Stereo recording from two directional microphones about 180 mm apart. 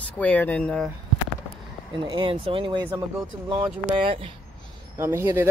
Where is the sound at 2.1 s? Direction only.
30° right (ahead or behind).